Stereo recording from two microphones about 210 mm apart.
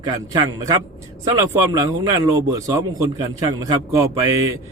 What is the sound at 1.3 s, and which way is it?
A man's voice, 20° right (ahead or behind).